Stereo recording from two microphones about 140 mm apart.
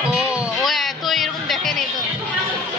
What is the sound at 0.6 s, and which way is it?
Music, centre (ahead or behind).